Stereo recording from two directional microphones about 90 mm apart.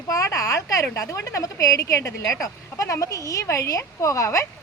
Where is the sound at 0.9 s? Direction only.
35° left (ahead or behind).